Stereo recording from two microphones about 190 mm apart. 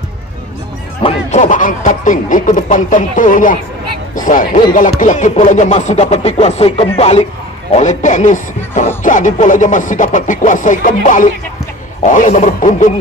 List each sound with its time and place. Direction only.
1.0 s speech: 40° left (ahead or behind)